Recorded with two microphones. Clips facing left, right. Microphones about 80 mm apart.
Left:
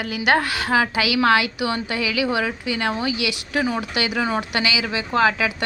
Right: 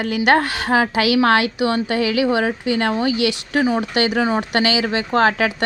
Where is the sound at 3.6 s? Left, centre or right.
Right.